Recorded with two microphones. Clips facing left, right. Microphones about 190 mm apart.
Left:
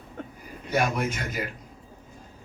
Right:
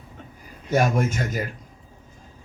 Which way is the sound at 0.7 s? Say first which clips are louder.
Right 4 dB; 45° right (ahead or behind).